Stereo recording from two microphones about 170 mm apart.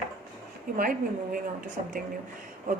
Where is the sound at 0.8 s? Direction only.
55° right (ahead or behind).